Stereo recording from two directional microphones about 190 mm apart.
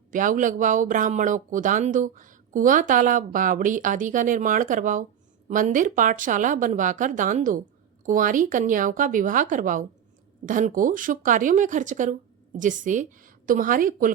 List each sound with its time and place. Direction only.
0.1 s speech: 45° right (ahead or behind)